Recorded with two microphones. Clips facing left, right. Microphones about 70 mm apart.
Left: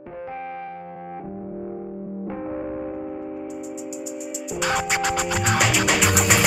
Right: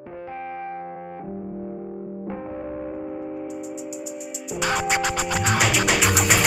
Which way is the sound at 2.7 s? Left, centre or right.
Centre.